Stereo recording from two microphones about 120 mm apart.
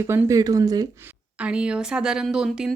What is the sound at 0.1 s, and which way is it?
Speech, 25° right (ahead or behind).